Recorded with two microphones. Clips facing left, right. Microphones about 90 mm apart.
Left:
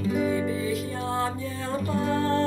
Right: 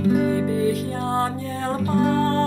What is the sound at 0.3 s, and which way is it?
Music, 50° right (ahead or behind).